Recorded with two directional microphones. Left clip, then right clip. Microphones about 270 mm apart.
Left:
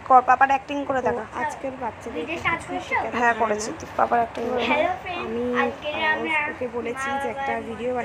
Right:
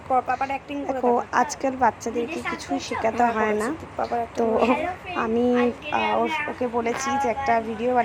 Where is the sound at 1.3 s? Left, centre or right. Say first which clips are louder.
Right 5 dB; centre.